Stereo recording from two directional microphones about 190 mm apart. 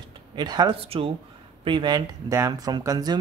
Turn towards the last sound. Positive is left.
turn(degrees=-20)  # may be behind; listen again after turning